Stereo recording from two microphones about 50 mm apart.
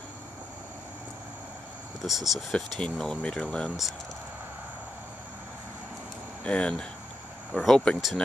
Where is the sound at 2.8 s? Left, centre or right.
Centre.